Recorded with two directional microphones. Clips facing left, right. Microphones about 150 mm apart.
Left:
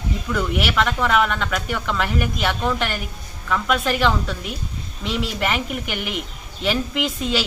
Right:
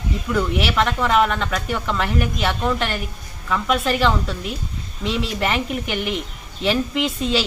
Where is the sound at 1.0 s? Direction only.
35° right (ahead or behind).